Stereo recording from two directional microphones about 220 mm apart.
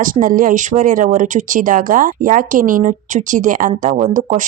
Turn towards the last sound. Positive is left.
turn(degrees=-35)  # may be behind; listen again after turning